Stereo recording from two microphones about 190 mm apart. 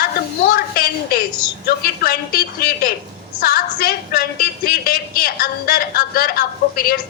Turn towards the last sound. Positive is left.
turn(degrees=50)  # may be behind; listen again after turning